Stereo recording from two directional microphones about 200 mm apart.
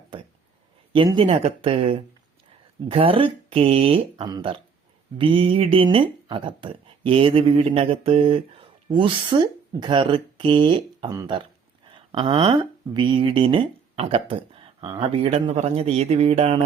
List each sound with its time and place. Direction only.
0.9 s speech: 25° right (ahead or behind)